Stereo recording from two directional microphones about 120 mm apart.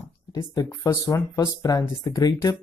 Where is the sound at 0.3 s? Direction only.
30° left (ahead or behind).